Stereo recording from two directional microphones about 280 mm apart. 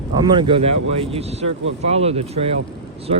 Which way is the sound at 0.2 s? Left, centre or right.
Centre.